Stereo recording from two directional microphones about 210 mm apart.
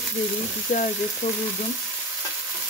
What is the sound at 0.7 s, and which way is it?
Speech, 35° left (ahead or behind).